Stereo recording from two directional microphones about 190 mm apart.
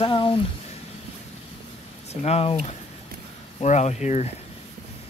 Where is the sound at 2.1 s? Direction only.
35° left (ahead or behind).